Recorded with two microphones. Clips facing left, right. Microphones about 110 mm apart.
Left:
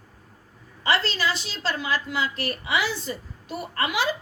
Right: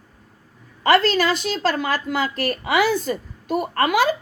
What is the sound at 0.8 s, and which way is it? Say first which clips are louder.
A woman's voice: right 8 dB; 50° right (ahead or behind).